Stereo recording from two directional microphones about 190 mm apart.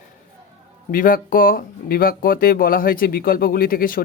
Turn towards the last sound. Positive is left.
turn(degrees=50)  # may be behind; listen again after turning